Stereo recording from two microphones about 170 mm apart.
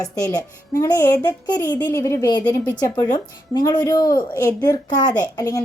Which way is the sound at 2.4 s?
10° left (ahead or behind).